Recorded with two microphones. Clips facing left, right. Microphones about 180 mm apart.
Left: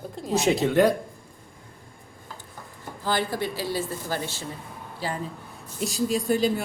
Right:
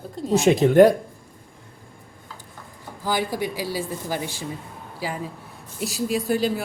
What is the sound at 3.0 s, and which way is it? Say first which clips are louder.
A woman's voice: right 2 dB; 10° right (ahead or behind).